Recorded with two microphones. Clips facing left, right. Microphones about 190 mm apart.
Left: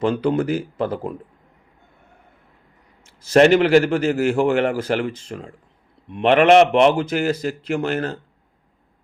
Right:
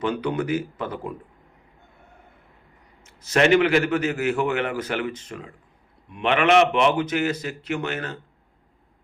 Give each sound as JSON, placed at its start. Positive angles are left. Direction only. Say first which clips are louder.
{"t": 0.0, "sound": "a man's voice", "louder": "left 5 dB", "side_deg": 30}
{"t": 3.3, "sound": "a man's voice", "louder": "left 5 dB", "side_deg": 40}